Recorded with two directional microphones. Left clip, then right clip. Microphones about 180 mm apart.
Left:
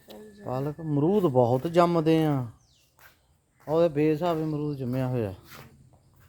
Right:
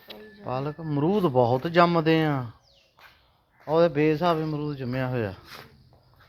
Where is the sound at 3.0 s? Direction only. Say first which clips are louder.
Right 3 dB; 10° right (ahead or behind).